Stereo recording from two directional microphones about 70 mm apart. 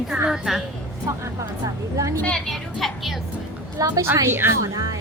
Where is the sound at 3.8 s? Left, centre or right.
Right.